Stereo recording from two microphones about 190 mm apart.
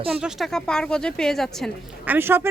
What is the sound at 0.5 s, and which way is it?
Speech, 5° left (ahead or behind).